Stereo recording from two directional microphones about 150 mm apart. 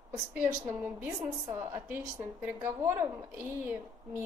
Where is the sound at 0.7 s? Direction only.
10° right (ahead or behind).